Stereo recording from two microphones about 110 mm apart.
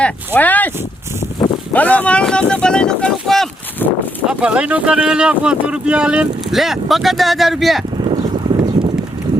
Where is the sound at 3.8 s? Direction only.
15° left (ahead or behind).